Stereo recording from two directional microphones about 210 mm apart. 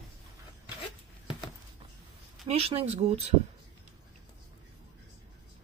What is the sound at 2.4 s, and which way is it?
Speech, 30° right (ahead or behind).